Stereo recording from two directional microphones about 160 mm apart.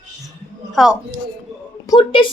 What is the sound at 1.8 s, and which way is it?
Speech, 25° left (ahead or behind).